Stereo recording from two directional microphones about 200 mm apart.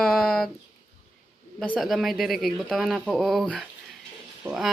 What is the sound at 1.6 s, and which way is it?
Speech, 5° left (ahead or behind).